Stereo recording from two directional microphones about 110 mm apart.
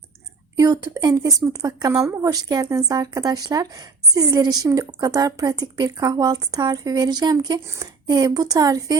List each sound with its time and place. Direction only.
0.5 s a woman's voice: 35° right (ahead or behind)